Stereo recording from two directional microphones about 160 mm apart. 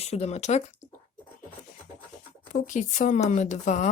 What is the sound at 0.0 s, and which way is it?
Speech, 40° left (ahead or behind).